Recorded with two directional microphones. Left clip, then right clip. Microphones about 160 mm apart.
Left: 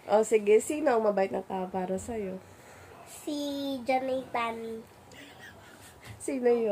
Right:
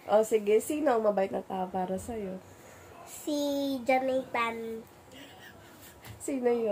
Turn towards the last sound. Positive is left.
turn(degrees=20)  # may be behind; listen again after turning